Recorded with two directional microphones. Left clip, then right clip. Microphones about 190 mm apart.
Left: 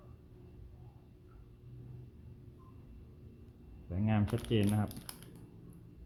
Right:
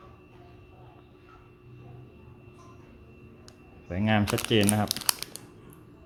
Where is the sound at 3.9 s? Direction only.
15° right (ahead or behind).